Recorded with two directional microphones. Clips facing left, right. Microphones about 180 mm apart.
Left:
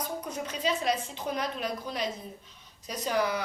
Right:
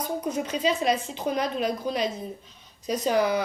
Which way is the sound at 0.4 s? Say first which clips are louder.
Right 3 dB; 20° right (ahead or behind).